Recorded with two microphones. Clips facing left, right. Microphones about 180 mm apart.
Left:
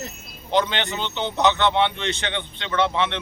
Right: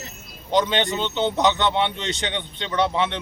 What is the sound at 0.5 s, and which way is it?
A man's voice, 20° right (ahead or behind).